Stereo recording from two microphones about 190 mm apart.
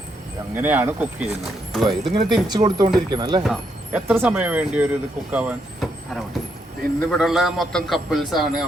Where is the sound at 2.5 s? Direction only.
20° right (ahead or behind).